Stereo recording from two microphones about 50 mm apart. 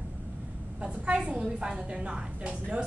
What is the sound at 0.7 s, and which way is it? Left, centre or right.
A woman's voice, right.